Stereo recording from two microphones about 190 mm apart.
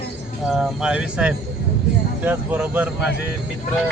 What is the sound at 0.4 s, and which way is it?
Speech, 5° right (ahead or behind).